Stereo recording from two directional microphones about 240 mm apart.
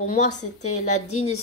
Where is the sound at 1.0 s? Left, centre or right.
Left.